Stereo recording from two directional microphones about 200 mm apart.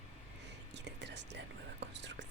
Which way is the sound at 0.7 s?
60° right (ahead or behind).